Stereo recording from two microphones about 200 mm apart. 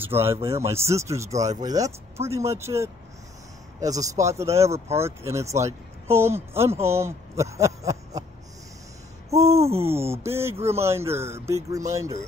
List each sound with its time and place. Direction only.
0.0 s speech: 10° right (ahead or behind)
9.3 s speech: 15° right (ahead or behind)